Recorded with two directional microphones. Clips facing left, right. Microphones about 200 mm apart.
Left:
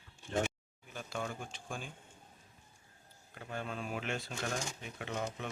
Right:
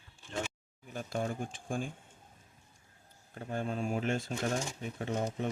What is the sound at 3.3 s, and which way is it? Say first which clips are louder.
Speech: right 6 dB; 40° right (ahead or behind).